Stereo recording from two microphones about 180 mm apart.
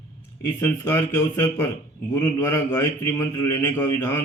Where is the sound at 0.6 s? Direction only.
15° left (ahead or behind).